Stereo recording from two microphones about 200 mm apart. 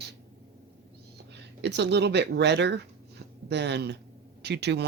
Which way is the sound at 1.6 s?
60° right (ahead or behind).